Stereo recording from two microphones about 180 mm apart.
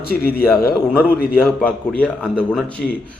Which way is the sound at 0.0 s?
60° left (ahead or behind).